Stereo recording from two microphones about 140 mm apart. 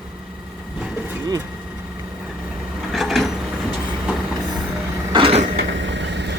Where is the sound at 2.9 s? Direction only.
Centre (ahead or behind).